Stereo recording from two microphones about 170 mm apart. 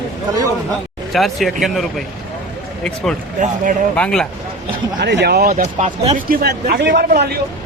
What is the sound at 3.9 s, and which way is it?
Speech, 5° left (ahead or behind).